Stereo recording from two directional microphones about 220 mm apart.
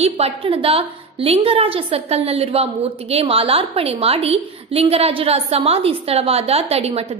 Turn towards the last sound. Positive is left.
turn(degrees=-30)  # may be behind; listen again after turning